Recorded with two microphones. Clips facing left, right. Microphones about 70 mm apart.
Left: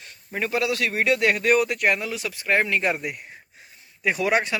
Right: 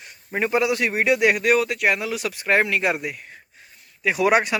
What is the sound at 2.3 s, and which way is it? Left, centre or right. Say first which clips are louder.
Speech: right 2 dB; right.